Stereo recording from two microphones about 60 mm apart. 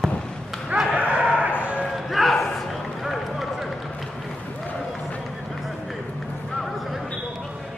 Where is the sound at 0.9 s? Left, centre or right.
Right.